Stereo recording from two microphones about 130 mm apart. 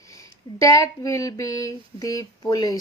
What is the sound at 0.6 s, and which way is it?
Speech, 25° left (ahead or behind).